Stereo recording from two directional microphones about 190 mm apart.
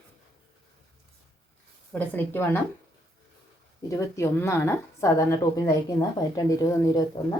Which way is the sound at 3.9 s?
15° left (ahead or behind).